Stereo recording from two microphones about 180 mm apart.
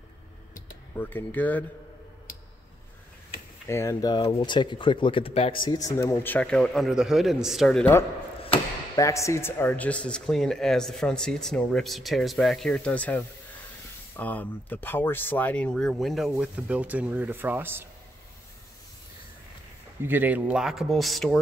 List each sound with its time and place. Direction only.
0.9 s speech: 10° left (ahead or behind)
3.6 s speech: 15° left (ahead or behind)
8.9 s speech: 15° left (ahead or behind); by 17.8 s 10° right (ahead or behind)
20.0 s speech: 10° right (ahead or behind)